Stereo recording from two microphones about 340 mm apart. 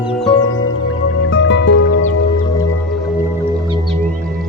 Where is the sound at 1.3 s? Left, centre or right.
Left.